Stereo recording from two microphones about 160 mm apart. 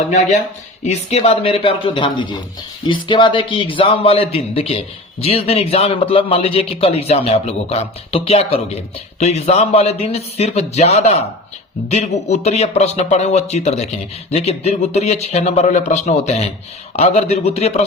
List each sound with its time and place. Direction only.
0.9 s a man's voice: 40° left (ahead or behind)